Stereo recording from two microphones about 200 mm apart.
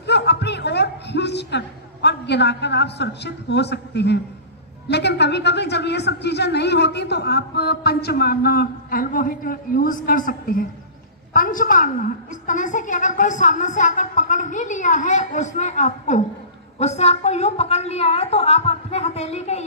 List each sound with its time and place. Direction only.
0.0 s a man's voice: 55° left (ahead or behind); by 19.6 s 30° left (ahead or behind)